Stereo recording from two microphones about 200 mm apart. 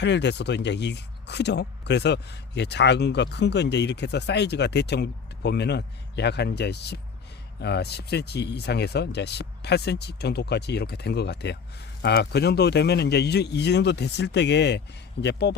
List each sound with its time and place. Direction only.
0.0 s speech: 60° left (ahead or behind)